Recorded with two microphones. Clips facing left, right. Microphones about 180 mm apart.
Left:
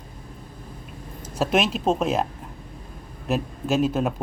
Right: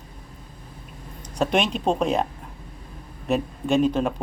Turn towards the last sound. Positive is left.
turn(degrees=5)  # may be behind; listen again after turning